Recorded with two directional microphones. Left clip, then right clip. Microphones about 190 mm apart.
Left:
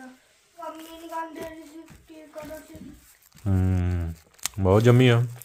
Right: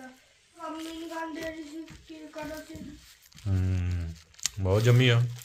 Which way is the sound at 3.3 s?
55° left (ahead or behind).